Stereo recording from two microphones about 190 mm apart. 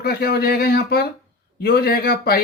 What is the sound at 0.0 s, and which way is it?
Speech, 55° left (ahead or behind).